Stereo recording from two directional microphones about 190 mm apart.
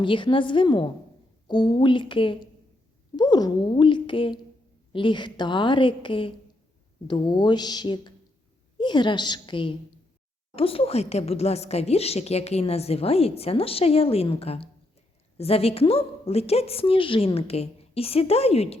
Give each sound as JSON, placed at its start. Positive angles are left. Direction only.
{"t": 0.0, "sound": "a woman's voice", "side_deg": 25}